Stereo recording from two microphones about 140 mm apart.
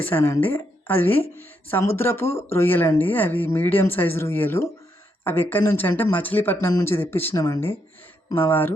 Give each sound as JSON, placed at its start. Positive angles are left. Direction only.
{"t": 0.0, "sound": "speech", "side_deg": 15}